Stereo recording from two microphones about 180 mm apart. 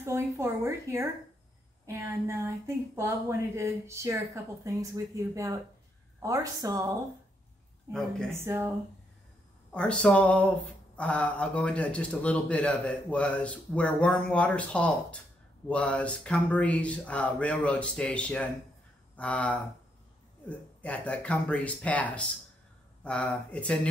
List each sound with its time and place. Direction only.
0.0 s a woman's voice: 15° right (ahead or behind)
8.3 s speech: 15° right (ahead or behind)
9.8 s a man's voice: 5° left (ahead or behind)